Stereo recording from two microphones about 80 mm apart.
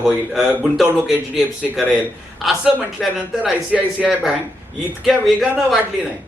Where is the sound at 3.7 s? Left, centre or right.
Centre.